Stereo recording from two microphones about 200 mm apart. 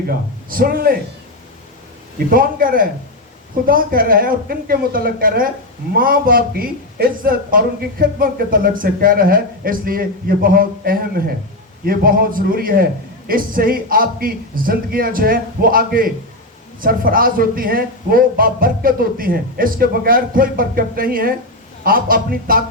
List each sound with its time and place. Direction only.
0.5 s speech: 45° right (ahead or behind)
2.1 s speech: 45° right (ahead or behind)